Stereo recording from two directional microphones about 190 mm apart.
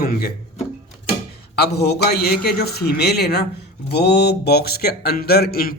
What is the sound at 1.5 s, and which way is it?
Speech, 60° left (ahead or behind).